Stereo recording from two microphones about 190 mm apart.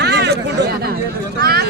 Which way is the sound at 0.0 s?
60° right (ahead or behind).